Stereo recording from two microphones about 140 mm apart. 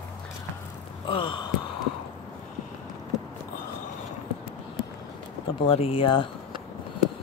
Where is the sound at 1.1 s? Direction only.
35° left (ahead or behind).